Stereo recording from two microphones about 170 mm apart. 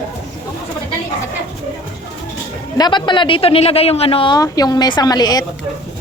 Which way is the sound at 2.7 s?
25° left (ahead or behind).